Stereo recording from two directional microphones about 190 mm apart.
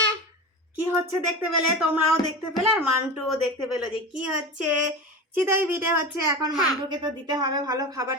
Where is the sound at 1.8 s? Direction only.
5° right (ahead or behind).